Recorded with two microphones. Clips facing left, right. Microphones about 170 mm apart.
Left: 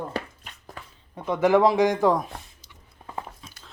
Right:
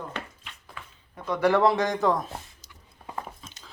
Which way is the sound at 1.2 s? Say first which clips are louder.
Left 3 dB; 20° left (ahead or behind).